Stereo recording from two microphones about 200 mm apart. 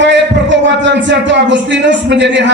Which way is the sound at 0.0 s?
60° right (ahead or behind).